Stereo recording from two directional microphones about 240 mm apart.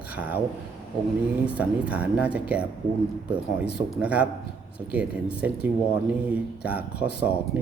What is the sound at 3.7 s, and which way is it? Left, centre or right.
Speech, centre.